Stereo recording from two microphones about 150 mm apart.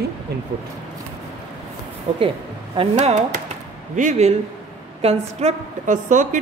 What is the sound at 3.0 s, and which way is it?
A woman's voice, 55° right (ahead or behind).